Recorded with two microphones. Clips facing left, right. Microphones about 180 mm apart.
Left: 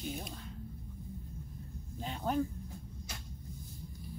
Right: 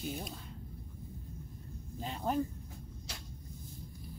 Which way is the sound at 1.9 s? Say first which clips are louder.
Even; centre (ahead or behind).